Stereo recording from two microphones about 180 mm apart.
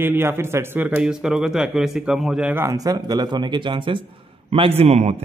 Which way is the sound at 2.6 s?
20° right (ahead or behind).